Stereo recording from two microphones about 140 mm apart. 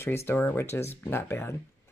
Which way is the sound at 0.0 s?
20° left (ahead or behind).